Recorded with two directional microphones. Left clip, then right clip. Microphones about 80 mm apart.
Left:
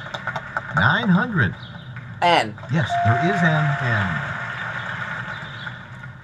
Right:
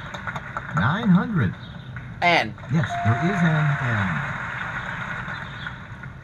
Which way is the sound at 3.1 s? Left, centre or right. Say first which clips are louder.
Left 4 dB; centre.